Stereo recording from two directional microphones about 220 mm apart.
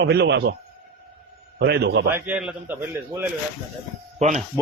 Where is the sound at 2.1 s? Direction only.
5° right (ahead or behind).